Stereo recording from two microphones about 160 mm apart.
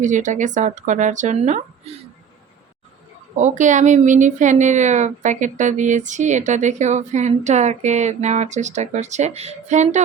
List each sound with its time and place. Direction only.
0.0 s a woman's voice: 50° right (ahead or behind)
3.3 s a woman's voice: 50° right (ahead or behind)